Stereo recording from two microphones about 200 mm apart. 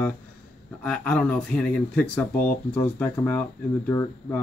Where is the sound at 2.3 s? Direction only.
45° left (ahead or behind).